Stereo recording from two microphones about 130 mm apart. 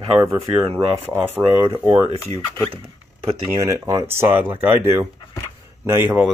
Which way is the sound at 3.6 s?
25° right (ahead or behind).